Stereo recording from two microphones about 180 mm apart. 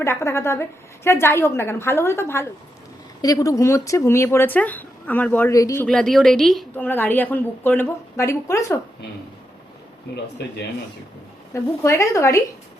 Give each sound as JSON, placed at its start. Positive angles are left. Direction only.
{"t": 0.0, "sound": "a woman's voice", "side_deg": 15}
{"t": 5.8, "sound": "a woman's voice", "side_deg": 5}
{"t": 11.5, "sound": "a woman's voice", "side_deg": 15}